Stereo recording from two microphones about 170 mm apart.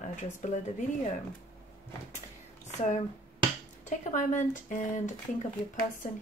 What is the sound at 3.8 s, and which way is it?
Speech, 45° left (ahead or behind).